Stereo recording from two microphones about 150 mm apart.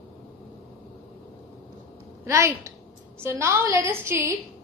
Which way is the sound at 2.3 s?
20° right (ahead or behind).